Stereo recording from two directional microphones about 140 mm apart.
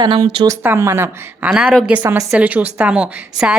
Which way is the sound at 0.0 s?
30° right (ahead or behind).